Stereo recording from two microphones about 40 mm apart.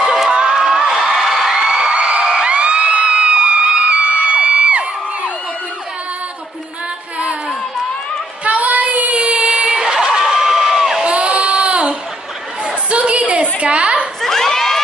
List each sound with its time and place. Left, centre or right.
0.0 s crowd: centre
0.3 s crowd: right
0.6 s music: centre
2.0 s a sound: right
4.3 s crowd: right
8.5 s child singing: right
9.2 s crowd: right
11.1 s a sound: right
14.2 s a sound: centre